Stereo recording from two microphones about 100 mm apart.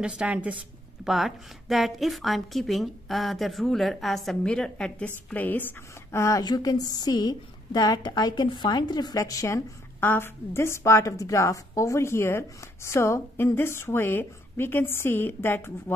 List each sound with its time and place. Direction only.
0.0 s a woman's voice: 10° right (ahead or behind)
1.0 s a woman's voice: centre (ahead or behind); by 6.4 s 30° left (ahead or behind)
6.4 s a woman's voice: 40° left (ahead or behind)
9.9 s a woman's voice: 20° left (ahead or behind)